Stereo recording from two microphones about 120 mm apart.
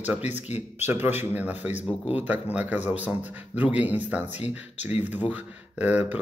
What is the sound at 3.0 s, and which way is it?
A man's voice, 15° right (ahead or behind).